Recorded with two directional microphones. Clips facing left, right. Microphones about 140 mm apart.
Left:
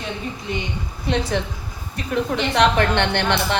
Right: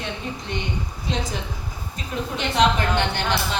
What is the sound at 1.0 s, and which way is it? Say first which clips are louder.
A woman's voice: left 7 dB; 65° left (ahead or behind).